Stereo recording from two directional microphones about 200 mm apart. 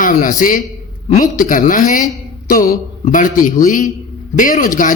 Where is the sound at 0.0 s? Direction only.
40° left (ahead or behind).